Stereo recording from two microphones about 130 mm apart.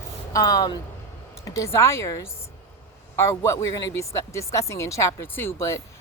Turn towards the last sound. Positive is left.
turn(degrees=20)  # may be behind; listen again after turning